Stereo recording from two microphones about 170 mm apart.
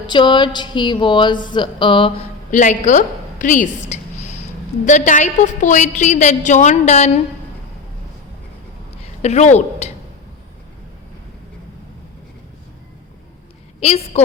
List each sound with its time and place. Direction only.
0.1 s speech: 25° left (ahead or behind)
2.5 s a woman's voice: 45° left (ahead or behind)
4.2 s a sound: 40° left (ahead or behind)
4.9 s a woman's voice: 45° left (ahead or behind)
9.2 s a woman's voice: 40° left (ahead or behind)
13.7 s a woman's voice: 40° left (ahead or behind)